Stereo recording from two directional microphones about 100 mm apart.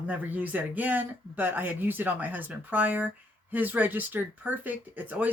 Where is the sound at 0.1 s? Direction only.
15° right (ahead or behind).